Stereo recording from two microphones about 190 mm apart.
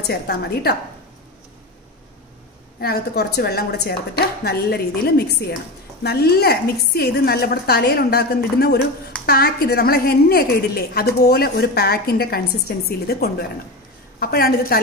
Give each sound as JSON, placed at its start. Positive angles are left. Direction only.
{"t": 0.0, "sound": "a woman's voice", "side_deg": 60}
{"t": 2.8, "sound": "a woman's voice", "side_deg": 55}